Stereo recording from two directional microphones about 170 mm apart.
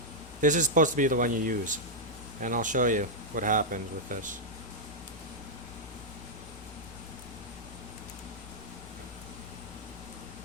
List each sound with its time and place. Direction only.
0.4 s speech: 50° right (ahead or behind)